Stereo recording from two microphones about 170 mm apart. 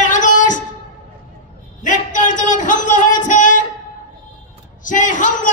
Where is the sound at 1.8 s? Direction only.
50° left (ahead or behind).